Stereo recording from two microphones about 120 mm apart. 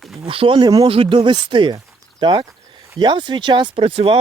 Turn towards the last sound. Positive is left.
turn(degrees=-50)  # may be behind; listen again after turning